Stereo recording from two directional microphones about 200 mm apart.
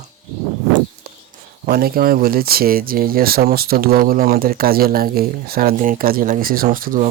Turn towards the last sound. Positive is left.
turn(degrees=-45)  # may be behind; listen again after turning